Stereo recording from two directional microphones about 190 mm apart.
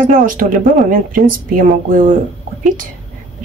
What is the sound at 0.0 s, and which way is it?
A woman's voice, 45° right (ahead or behind).